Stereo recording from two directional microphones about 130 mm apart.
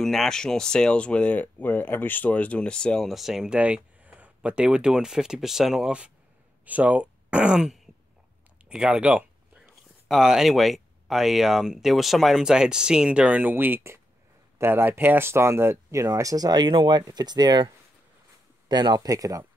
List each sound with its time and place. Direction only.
0.0 s speech: 5° left (ahead or behind); by 17.6 s 35° right (ahead or behind)
18.7 s speech: 35° right (ahead or behind)